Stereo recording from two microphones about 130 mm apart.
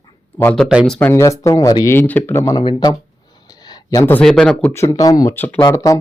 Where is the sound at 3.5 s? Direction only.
30° left (ahead or behind).